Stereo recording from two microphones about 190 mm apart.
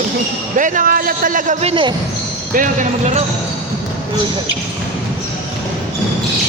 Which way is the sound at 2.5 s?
45° right (ahead or behind).